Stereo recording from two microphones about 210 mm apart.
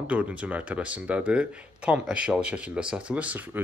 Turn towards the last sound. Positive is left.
turn(degrees=-5)  # may be behind; listen again after turning